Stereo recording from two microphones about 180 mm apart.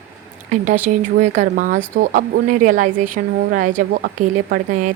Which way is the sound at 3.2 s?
60° right (ahead or behind).